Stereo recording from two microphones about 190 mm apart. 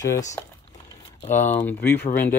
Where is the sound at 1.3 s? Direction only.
10° left (ahead or behind).